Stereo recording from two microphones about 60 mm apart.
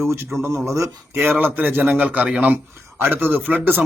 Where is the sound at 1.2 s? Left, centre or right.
Right.